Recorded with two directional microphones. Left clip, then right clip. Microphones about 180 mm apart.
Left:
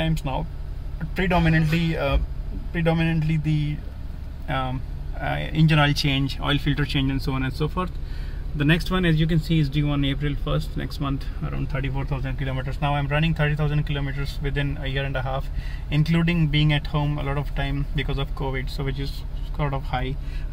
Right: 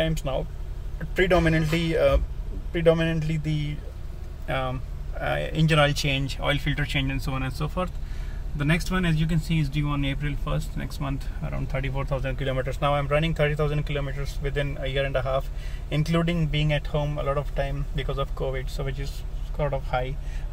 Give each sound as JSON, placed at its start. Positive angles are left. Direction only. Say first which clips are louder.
{"t": 0.0, "sound": "speech", "louder": "right 1 dB", "side_deg": 0}
{"t": 11.7, "sound": "speech", "louder": "right 3 dB", "side_deg": -10}
{"t": 12.9, "sound": "speech", "louder": "even", "side_deg": -10}